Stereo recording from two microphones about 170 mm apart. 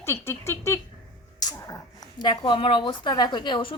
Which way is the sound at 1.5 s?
20° left (ahead or behind).